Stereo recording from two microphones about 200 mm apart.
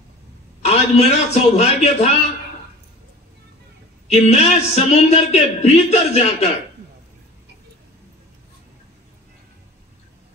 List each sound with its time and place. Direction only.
0.6 s a man's voice: 30° left (ahead or behind)
4.1 s a man's voice: 30° left (ahead or behind)